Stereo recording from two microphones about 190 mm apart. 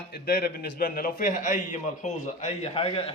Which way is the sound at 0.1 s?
55° left (ahead or behind).